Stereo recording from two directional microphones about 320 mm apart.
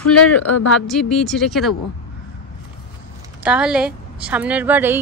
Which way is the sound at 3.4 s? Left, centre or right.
Centre.